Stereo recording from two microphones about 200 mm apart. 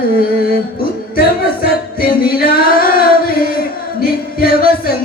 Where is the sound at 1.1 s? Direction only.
50° left (ahead or behind).